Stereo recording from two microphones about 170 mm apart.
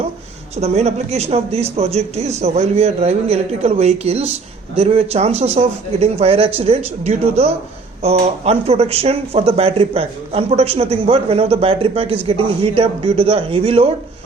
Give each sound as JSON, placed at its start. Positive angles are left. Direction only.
{"t": 0.5, "sound": "speech", "side_deg": -40}